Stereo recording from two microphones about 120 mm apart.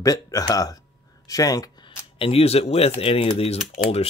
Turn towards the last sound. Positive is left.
turn(degrees=60)  # may be behind; listen again after turning